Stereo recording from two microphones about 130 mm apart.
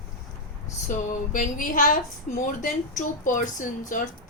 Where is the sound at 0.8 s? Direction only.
75° left (ahead or behind).